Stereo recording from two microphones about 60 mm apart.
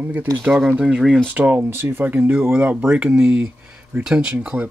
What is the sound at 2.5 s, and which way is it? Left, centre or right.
Speech, centre.